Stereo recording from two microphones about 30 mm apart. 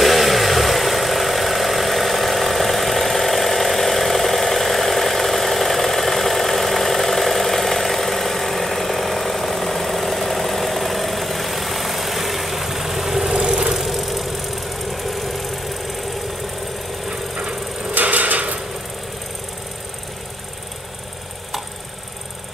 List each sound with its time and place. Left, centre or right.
0.0 s vehicle: centre
13.3 s vehicle: right
13.7 s vehicle: centre
17.9 s a sound: right